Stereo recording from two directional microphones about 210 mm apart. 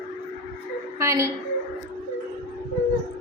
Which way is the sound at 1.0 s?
15° right (ahead or behind).